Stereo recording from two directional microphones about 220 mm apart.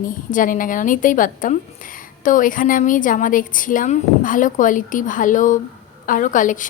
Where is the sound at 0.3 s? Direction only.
35° left (ahead or behind).